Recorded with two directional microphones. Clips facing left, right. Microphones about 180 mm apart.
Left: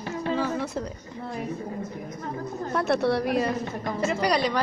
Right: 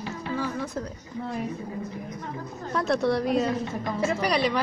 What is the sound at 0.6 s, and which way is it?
Speech, 10° left (ahead or behind).